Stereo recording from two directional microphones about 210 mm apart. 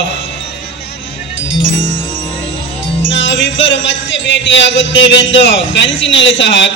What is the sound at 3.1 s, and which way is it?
Music, 60° left (ahead or behind).